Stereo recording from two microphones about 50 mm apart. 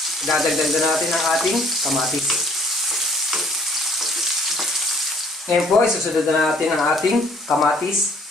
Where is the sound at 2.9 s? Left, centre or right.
Centre.